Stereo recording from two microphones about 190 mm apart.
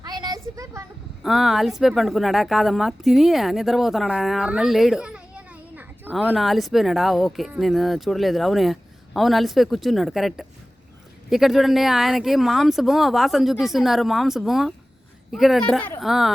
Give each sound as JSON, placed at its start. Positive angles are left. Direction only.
{"t": 0.0, "sound": "a sound", "side_deg": -20}
{"t": 1.2, "sound": "speech", "side_deg": 0}
{"t": 6.3, "sound": "speech", "side_deg": 0}